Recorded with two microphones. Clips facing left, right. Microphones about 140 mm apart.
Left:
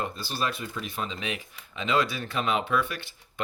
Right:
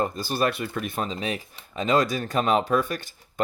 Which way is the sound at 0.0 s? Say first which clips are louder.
Right 6 dB; 45° right (ahead or behind).